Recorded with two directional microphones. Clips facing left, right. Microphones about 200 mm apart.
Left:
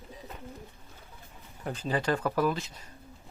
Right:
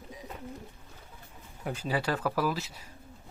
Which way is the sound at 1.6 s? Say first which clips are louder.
Left 2 dB; 10° right (ahead or behind).